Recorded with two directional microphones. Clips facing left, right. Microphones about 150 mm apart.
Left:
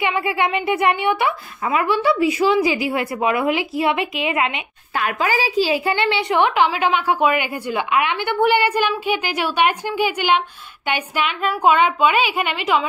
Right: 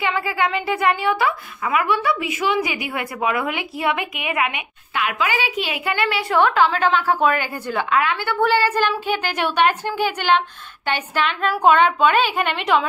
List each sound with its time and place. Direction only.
0.0 s a woman's voice: 25° left (ahead or behind)
4.9 s a woman's voice: 40° left (ahead or behind); by 12.8 s 5° left (ahead or behind)